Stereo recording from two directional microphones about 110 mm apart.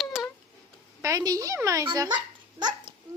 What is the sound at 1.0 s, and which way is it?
Speech, 30° right (ahead or behind).